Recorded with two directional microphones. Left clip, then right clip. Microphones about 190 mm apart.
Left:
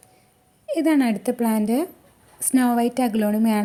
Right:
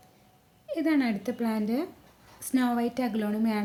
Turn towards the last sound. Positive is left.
turn(degrees=40)  # may be behind; listen again after turning